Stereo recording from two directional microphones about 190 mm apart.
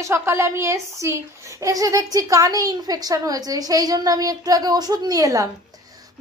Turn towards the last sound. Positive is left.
turn(degrees=-20)  # may be behind; listen again after turning